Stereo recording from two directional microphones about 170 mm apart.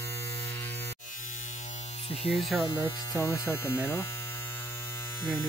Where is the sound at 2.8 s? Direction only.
15° left (ahead or behind).